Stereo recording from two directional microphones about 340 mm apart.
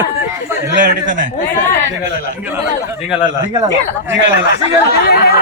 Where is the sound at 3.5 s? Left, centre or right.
Centre.